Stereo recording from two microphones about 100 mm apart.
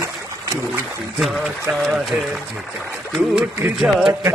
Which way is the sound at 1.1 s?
5° right (ahead or behind).